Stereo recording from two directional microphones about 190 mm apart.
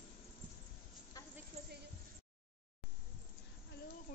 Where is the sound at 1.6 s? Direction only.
35° right (ahead or behind).